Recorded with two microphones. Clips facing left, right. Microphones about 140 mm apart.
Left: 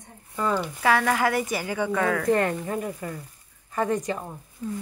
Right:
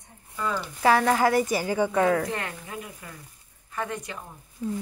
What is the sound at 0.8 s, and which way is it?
Speech, 25° right (ahead or behind).